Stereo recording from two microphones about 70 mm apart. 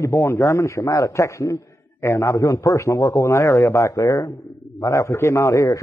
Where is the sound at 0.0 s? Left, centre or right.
Left.